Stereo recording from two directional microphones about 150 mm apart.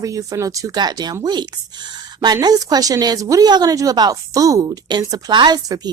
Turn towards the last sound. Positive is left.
turn(degrees=-25)  # may be behind; listen again after turning